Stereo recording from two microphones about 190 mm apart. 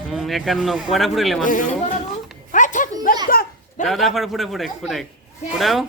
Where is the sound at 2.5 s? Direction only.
40° left (ahead or behind).